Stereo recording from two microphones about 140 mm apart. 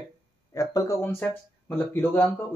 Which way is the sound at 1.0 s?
10° left (ahead or behind).